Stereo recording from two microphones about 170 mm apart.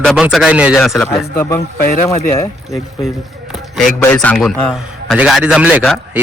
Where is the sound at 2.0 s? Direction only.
20° left (ahead or behind).